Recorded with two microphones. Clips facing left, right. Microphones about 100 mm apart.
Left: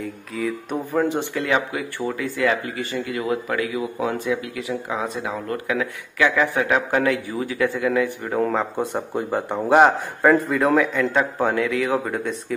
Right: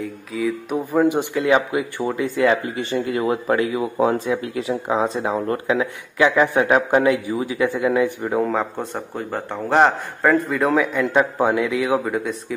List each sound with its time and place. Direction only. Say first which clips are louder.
0.0 s speech: right 3 dB; centre (ahead or behind); by 8.4 s 20° right (ahead or behind)
8.4 s a man's voice: left 1 dB; centre (ahead or behind)
12.0 s speech: right 2 dB; 5° right (ahead or behind)